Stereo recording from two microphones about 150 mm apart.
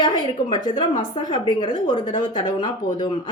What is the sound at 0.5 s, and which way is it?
Speech, 30° left (ahead or behind).